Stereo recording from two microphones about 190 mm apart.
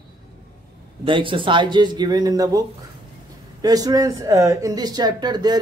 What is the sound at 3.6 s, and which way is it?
Speech, 20° right (ahead or behind).